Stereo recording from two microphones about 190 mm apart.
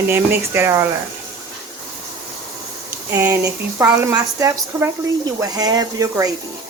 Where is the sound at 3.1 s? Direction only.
15° right (ahead or behind).